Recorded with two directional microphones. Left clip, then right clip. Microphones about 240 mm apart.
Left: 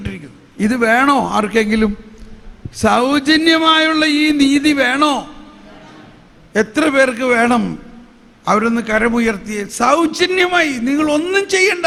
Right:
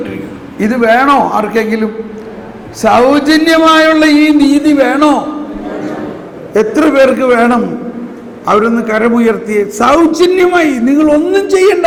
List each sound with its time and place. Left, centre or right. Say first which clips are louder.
0.6 s speech: right 5 dB; left
6.6 s a man's voice: right 6 dB; left
8.9 s a man's voice: right 4 dB; left